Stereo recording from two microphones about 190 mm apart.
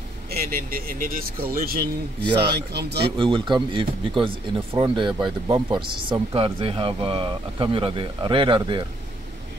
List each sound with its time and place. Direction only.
0.3 s speech: 50° right (ahead or behind)
3.0 s speech: 25° right (ahead or behind)